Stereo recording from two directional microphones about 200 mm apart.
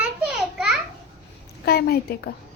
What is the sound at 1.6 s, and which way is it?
Speech, 50° left (ahead or behind).